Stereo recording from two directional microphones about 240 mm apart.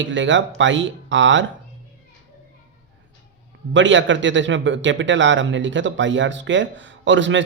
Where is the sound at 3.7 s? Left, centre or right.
Right.